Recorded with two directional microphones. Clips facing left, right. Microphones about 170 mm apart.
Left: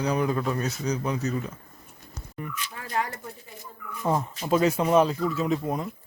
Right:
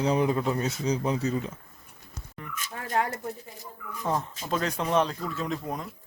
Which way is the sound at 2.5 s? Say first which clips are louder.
Right 2 dB; 50° right (ahead or behind).